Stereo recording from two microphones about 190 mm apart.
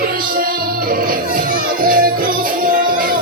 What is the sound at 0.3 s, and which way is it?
Music, 50° right (ahead or behind).